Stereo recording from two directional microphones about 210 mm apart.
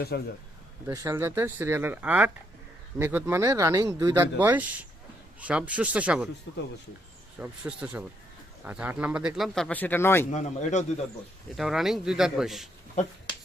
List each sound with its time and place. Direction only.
0.1 s a man's voice: 50° left (ahead or behind)
0.9 s speech: 15° right (ahead or behind)
7.3 s speech: 5° right (ahead or behind); by 10.2 s 10° left (ahead or behind)
10.3 s a man's voice: 35° left (ahead or behind)
11.5 s speech: centre (ahead or behind)